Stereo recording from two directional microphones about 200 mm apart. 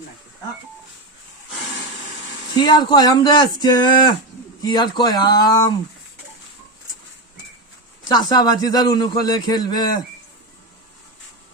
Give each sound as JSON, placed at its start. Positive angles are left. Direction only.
{"t": 2.6, "sound": "a man's voice", "side_deg": 20}
{"t": 8.0, "sound": "a man's voice", "side_deg": 20}